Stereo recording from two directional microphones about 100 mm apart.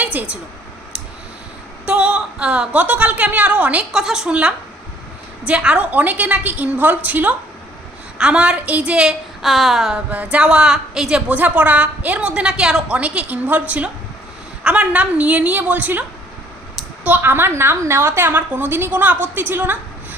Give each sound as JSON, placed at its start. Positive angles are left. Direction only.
{"t": 0.0, "sound": "speech", "side_deg": -15}
{"t": 1.9, "sound": "a woman's voice", "side_deg": -10}